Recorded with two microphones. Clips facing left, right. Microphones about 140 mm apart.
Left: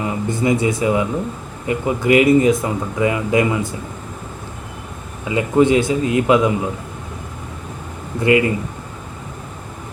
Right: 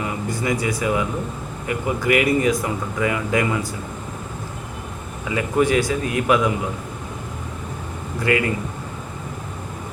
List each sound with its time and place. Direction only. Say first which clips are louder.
0.0 s speech: left 5 dB; 25° left (ahead or behind)
5.3 s speech: left 5 dB; 20° left (ahead or behind)
8.2 s speech: left 6 dB; 20° left (ahead or behind)